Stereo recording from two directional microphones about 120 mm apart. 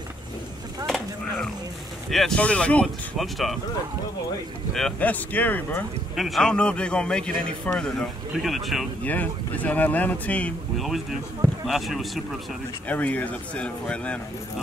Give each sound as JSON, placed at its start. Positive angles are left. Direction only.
{"t": 0.8, "sound": "a sound", "side_deg": 5}
{"t": 2.0, "sound": "speech", "side_deg": 5}
{"t": 4.9, "sound": "a man's voice", "side_deg": 15}
{"t": 6.1, "sound": "a man's voice", "side_deg": 0}
{"t": 9.0, "sound": "a man's voice", "side_deg": 15}
{"t": 10.8, "sound": "speech", "side_deg": 0}
{"t": 12.8, "sound": "a man's voice", "side_deg": 10}